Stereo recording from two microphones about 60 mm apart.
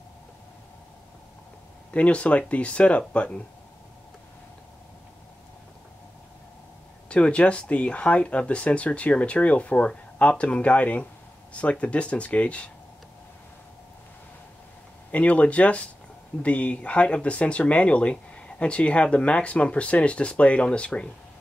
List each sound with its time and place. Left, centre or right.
1.9 s speech: left
7.1 s speech: centre
15.0 s speech: left